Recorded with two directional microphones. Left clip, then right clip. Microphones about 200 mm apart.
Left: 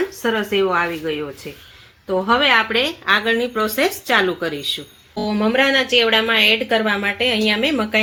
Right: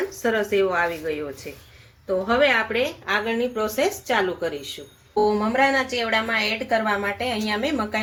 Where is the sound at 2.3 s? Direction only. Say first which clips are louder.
Left 5 dB; 45° left (ahead or behind).